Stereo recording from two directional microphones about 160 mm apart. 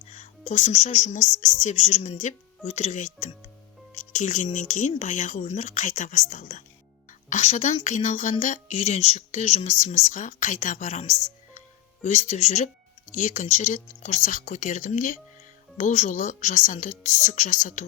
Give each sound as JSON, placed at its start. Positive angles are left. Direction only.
{"t": 0.1, "sound": "a woman's voice", "side_deg": 45}
{"t": 12.0, "sound": "a woman's voice", "side_deg": 45}